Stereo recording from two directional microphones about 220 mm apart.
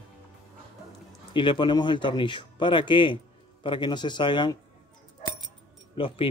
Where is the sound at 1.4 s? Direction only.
20° left (ahead or behind).